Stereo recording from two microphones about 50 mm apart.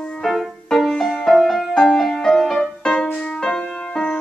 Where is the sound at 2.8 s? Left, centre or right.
Centre.